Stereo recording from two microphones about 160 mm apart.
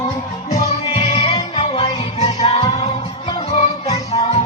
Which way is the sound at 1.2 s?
25° left (ahead or behind).